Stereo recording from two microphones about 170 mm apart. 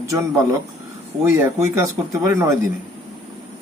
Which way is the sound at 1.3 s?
15° right (ahead or behind).